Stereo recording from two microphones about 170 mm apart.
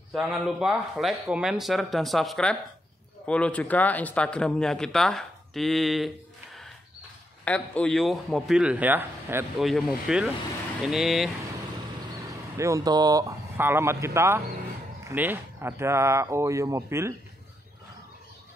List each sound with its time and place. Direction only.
0.1 s speech: centre (ahead or behind)
9.6 s speech: centre (ahead or behind)
12.3 s speech: 20° right (ahead or behind)